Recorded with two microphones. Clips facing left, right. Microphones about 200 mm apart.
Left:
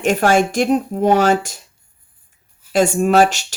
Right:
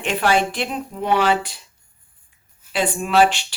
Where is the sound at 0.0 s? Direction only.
45° left (ahead or behind).